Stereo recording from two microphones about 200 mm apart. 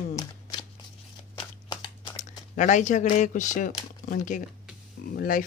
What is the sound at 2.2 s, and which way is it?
Speech, 40° left (ahead or behind).